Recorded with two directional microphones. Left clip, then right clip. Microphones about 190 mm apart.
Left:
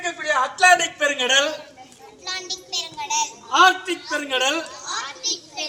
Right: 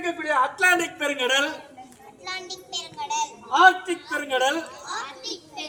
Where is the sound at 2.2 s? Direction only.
10° left (ahead or behind).